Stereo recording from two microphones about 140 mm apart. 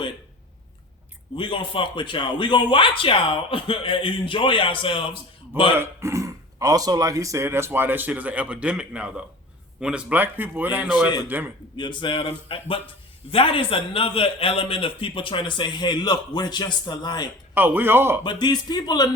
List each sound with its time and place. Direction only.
1.4 s a man's voice: 40° left (ahead or behind)
5.7 s a man's voice: 20° right (ahead or behind)
11.8 s a man's voice: 35° left (ahead or behind)
17.5 s speech: 15° right (ahead or behind)
18.2 s speech: 30° left (ahead or behind)